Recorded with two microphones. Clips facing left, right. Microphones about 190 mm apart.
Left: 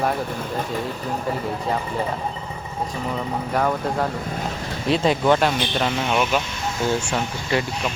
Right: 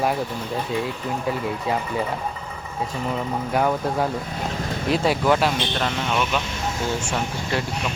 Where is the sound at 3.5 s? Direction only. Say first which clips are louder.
Right 1 dB; 5° right (ahead or behind).